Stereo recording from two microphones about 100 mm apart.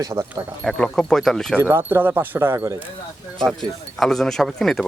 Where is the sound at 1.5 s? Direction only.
20° right (ahead or behind).